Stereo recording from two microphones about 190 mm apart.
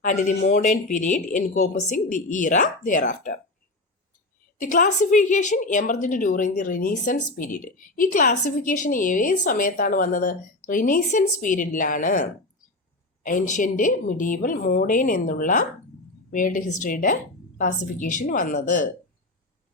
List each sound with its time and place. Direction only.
0.0 s speech: 40° left (ahead or behind)
4.6 s a woman's voice: 45° left (ahead or behind)